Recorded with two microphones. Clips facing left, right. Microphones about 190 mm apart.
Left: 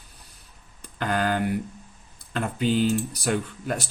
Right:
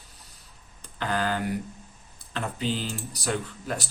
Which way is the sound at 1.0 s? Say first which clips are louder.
Left 3 dB; 55° left (ahead or behind).